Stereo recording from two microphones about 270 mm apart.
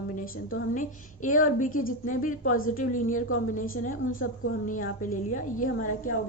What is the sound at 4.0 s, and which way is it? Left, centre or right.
Speech, left.